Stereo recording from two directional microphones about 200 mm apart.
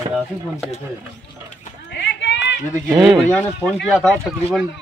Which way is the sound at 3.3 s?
5° left (ahead or behind).